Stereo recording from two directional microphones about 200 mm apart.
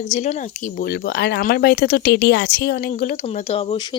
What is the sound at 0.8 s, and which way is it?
Speech, 50° left (ahead or behind).